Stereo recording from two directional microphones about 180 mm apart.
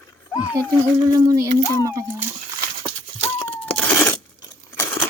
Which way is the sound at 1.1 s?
20° right (ahead or behind).